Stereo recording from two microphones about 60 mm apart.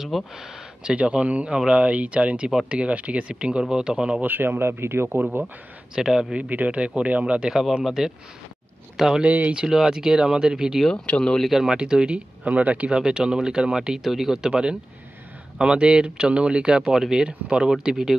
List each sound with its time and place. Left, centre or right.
0.0 s speech: centre
0.9 s speech: centre
4.2 s speech: right
5.9 s speech: centre
6.3 s speech: right; by 9.2 s centre
9.2 s speech: right
9.7 s speech: centre
10.9 s speech: centre
11.4 s speech: centre